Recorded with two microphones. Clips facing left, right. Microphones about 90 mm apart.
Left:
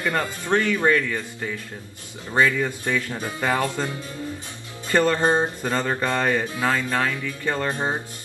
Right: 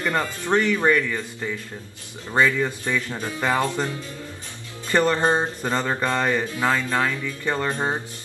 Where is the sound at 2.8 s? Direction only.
15° left (ahead or behind).